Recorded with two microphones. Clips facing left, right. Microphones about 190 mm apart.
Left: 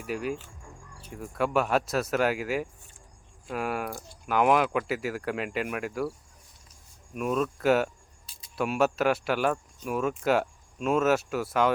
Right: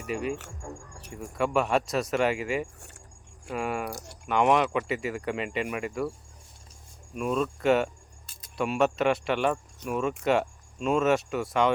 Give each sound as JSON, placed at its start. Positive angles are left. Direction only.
{"t": 0.1, "sound": "speech", "side_deg": 0}
{"t": 0.3, "sound": "music", "side_deg": -75}
{"t": 1.1, "sound": "speech", "side_deg": 0}
{"t": 3.9, "sound": "speech", "side_deg": -75}
{"t": 4.3, "sound": "speech", "side_deg": 0}
{"t": 7.1, "sound": "speech", "side_deg": 5}